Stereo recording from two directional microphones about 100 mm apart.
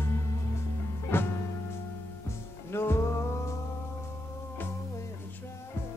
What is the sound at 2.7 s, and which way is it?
Music, 25° left (ahead or behind).